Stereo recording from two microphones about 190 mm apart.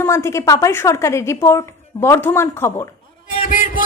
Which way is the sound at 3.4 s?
45° left (ahead or behind).